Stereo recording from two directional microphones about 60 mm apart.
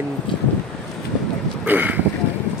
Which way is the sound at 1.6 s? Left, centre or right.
Right.